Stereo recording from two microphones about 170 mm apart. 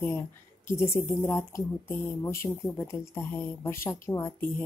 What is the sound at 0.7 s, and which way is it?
Speech, 15° left (ahead or behind).